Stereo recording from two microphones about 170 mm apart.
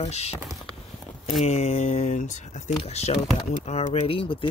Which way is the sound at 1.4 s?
40° left (ahead or behind).